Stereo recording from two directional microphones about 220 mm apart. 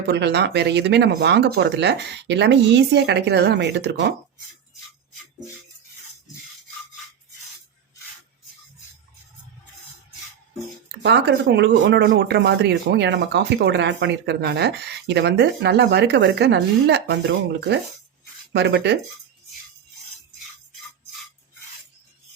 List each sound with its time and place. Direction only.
0.1 s speech: 50° right (ahead or behind)
11.0 s speech: 50° right (ahead or behind)